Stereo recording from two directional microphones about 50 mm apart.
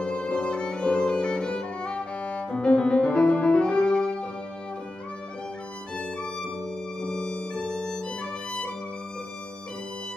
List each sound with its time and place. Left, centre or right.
0.0 s violin: centre
7.1 s violin: left